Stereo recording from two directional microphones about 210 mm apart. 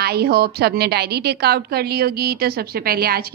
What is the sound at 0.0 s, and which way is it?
A woman's voice, 50° right (ahead or behind).